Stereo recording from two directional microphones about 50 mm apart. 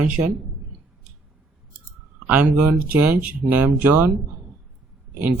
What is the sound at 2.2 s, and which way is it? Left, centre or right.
Speech, right.